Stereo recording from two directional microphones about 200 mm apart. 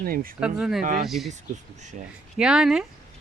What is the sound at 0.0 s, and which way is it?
Speech, 45° right (ahead or behind).